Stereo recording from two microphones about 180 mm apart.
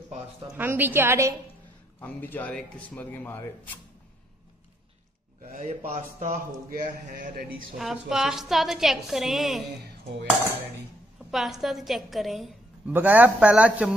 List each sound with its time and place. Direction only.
0.6 s speech: 10° right (ahead or behind)
2.0 s speech: 10° left (ahead or behind)
5.4 s speech: 45° right (ahead or behind)
7.7 s a woman's voice: 5° right (ahead or behind)
11.2 s a woman's voice: centre (ahead or behind)